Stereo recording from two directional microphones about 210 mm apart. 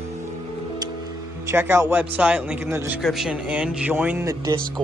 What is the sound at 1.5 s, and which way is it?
Speech, 10° right (ahead or behind).